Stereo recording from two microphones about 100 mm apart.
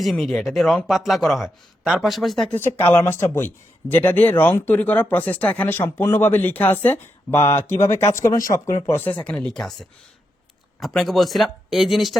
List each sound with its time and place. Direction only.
0.0 s speech: centre (ahead or behind)
2.5 s speech: 20° left (ahead or behind); by 9.7 s 5° left (ahead or behind)
10.8 s speech: centre (ahead or behind)